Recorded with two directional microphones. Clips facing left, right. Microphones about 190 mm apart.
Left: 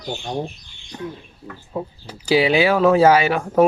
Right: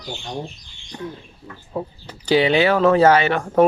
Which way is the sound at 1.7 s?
5° left (ahead or behind).